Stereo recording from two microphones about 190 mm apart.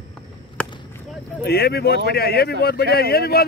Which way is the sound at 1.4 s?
55° left (ahead or behind).